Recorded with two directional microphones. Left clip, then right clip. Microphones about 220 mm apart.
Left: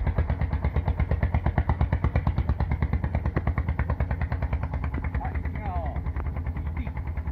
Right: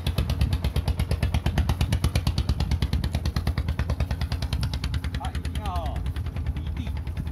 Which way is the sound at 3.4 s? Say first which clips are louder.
Left 1 dB; 50° right (ahead or behind).